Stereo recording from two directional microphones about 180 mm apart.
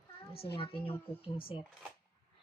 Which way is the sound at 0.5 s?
30° left (ahead or behind).